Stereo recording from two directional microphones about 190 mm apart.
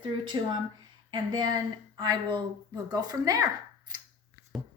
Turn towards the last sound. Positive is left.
turn(degrees=-20)  # may be behind; listen again after turning